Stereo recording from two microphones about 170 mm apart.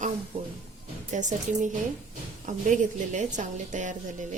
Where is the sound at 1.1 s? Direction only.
45° right (ahead or behind).